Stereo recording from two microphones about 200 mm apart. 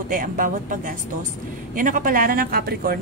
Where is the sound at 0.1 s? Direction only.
45° right (ahead or behind).